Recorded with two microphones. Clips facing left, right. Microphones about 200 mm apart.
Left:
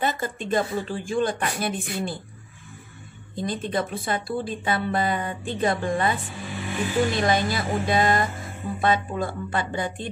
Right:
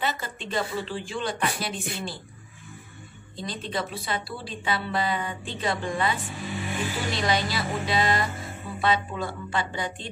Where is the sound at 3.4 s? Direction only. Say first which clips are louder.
Left 5 dB; 50° left (ahead or behind).